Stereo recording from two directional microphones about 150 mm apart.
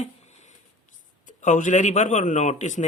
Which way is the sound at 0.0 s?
50° left (ahead or behind).